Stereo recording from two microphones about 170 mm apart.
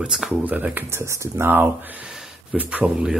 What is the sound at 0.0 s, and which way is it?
Speech, centre (ahead or behind).